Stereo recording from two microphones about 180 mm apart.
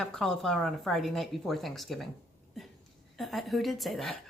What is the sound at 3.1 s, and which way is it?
A woman's voice, centre (ahead or behind).